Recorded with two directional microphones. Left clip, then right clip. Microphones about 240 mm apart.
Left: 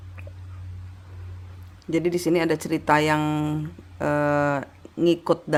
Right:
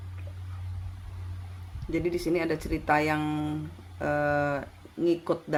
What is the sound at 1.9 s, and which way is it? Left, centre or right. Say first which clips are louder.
Speech: left 6 dB; left.